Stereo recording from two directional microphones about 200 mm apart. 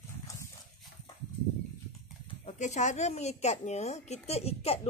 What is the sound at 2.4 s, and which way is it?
A woman's voice, 35° left (ahead or behind).